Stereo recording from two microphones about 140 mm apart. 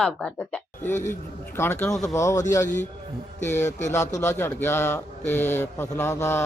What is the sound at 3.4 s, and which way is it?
Speech, 55° left (ahead or behind).